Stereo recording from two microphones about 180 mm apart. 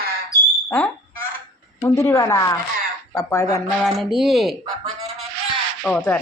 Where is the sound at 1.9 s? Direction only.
15° left (ahead or behind).